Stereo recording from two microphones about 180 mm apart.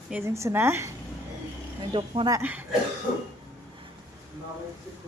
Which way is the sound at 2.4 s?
10° right (ahead or behind).